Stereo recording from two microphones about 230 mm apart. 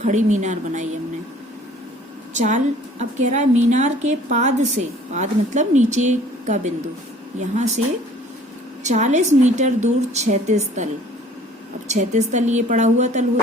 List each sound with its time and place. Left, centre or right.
0.0 s a woman's voice: right
2.3 s a woman's voice: right
8.8 s a woman's voice: right
11.9 s a woman's voice: right